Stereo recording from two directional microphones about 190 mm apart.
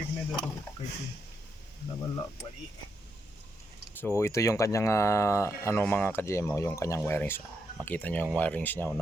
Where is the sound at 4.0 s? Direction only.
10° left (ahead or behind).